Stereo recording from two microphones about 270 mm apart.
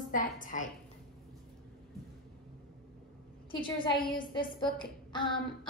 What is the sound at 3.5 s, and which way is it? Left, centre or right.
A woman's voice, centre.